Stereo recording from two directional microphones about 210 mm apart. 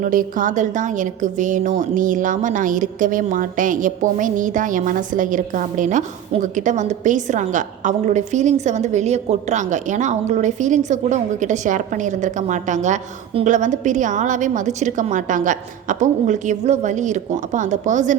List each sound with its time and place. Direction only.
0.0 s a woman's voice: 40° right (ahead or behind)